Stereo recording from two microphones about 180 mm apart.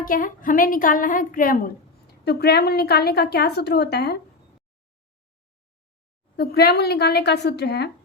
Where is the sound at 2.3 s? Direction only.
65° left (ahead or behind).